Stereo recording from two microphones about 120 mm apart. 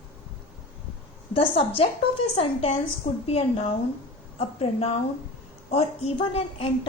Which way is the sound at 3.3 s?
55° left (ahead or behind).